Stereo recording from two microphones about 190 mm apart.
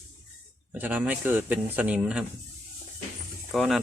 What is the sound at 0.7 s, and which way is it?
Speech, 10° right (ahead or behind).